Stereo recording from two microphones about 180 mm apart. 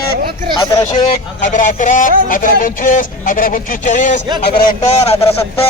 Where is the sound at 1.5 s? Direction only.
45° left (ahead or behind).